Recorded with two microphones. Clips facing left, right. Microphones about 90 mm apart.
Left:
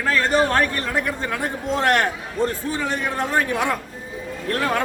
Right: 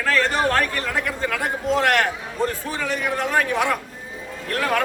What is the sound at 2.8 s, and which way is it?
Speech, 25° left (ahead or behind).